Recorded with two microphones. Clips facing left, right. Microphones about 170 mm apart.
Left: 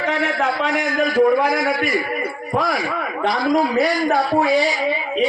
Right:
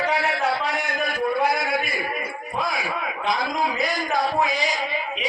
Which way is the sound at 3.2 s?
50° left (ahead or behind).